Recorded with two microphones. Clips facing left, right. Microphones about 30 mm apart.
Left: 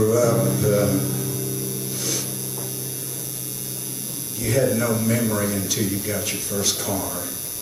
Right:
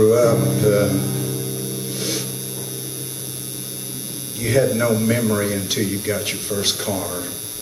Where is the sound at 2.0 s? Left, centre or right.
Right.